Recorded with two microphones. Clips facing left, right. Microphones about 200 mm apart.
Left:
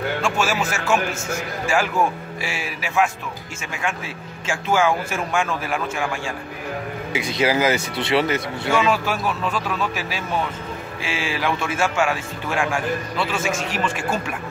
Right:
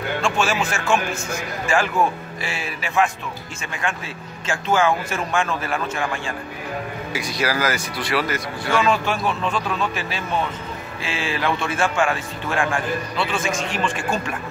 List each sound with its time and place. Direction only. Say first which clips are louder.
0.2 s a man's voice: right 3 dB; 5° left (ahead or behind)
7.1 s speech: left 4 dB; 20° left (ahead or behind)
8.8 s a man's voice: right 1 dB; 5° left (ahead or behind)